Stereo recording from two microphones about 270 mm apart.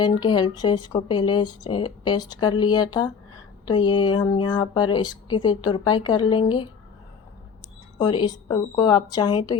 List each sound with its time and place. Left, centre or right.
0.0 s speech: centre
7.9 s speech: centre